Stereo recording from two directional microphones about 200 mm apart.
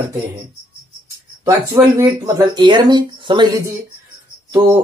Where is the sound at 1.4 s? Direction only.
15° right (ahead or behind).